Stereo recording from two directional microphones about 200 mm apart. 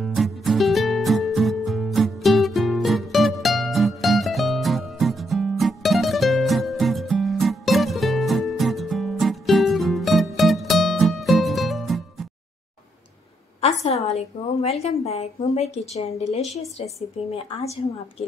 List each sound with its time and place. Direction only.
0.0 s music: centre (ahead or behind)
13.6 s a woman's voice: 30° left (ahead or behind)